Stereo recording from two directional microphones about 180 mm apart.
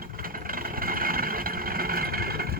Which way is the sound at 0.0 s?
50° right (ahead or behind).